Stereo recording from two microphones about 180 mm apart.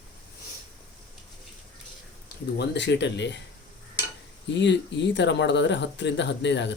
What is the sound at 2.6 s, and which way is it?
Speech, 75° left (ahead or behind).